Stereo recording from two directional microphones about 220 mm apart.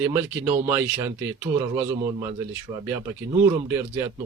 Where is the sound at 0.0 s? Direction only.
10° right (ahead or behind).